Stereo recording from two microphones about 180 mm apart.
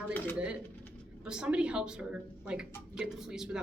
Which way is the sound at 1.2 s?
5° right (ahead or behind).